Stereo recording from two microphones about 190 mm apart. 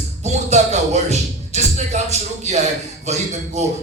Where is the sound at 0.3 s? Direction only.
35° right (ahead or behind).